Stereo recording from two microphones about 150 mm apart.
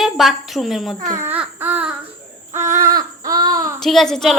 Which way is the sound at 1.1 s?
15° right (ahead or behind).